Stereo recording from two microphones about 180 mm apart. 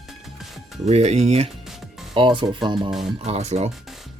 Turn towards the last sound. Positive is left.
turn(degrees=-35)  # may be behind; listen again after turning